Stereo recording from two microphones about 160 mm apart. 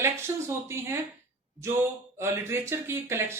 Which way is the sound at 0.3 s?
15° right (ahead or behind).